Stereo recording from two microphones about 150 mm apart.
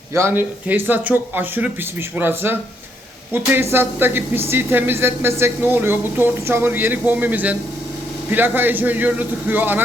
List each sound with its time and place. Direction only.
0.1 s a woman's voice: 15° right (ahead or behind)